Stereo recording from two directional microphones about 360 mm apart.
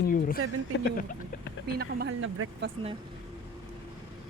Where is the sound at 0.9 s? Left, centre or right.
Left.